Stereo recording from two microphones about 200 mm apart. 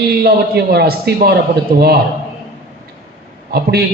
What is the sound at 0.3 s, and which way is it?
A man's voice, 55° right (ahead or behind).